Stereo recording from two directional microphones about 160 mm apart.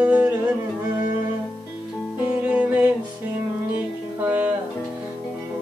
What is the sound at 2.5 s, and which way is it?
Music, 10° right (ahead or behind).